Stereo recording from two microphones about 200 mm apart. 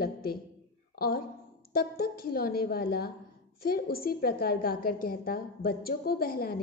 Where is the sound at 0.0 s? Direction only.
50° left (ahead or behind).